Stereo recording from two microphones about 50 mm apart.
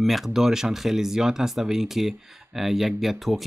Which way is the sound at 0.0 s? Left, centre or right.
Centre.